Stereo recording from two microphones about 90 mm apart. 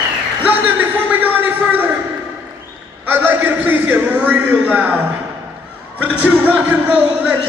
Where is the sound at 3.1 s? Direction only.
20° right (ahead or behind).